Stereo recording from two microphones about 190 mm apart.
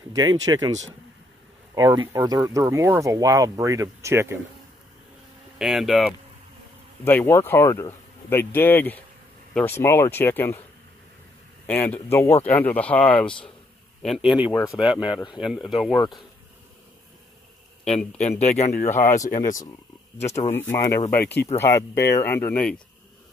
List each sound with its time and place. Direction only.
0.1 s speech: 20° right (ahead or behind)
1.8 s speech: 20° right (ahead or behind)
5.6 s speech: centre (ahead or behind)
7.1 s speech: 10° left (ahead or behind)
11.6 s speech: 10° left (ahead or behind)
14.2 s speech: 25° left (ahead or behind)
15.3 s speech: centre (ahead or behind)
17.8 s speech: 5° left (ahead or behind)
19.2 s speech: 45° left (ahead or behind)
20.5 s speech: 15° left (ahead or behind)